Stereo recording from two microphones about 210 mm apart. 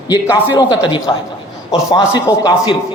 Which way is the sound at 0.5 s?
20° left (ahead or behind).